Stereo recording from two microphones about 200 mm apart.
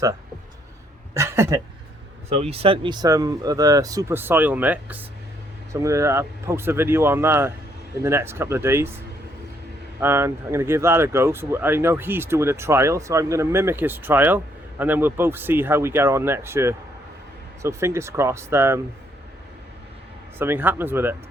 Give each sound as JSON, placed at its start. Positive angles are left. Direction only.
{"t": 1.1, "sound": "speech", "side_deg": -15}
{"t": 2.3, "sound": "speech", "side_deg": -30}
{"t": 10.0, "sound": "speech", "side_deg": -10}
{"t": 20.4, "sound": "speech", "side_deg": -10}